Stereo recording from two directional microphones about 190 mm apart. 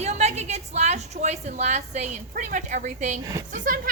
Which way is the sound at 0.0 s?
35° right (ahead or behind).